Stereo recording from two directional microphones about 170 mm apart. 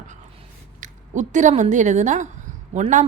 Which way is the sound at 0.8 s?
45° right (ahead or behind).